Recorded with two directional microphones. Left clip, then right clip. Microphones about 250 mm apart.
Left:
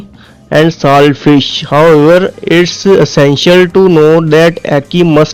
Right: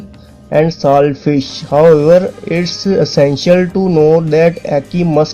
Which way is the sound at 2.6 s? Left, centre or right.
Left.